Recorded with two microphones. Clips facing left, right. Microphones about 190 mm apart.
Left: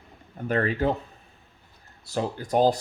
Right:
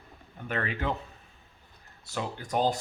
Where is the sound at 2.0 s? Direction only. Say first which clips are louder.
Left 6 dB; 35° left (ahead or behind).